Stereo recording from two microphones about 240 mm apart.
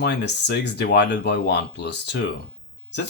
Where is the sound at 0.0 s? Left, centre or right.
Left.